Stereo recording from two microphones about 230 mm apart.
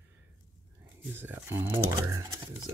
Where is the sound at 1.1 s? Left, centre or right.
Centre.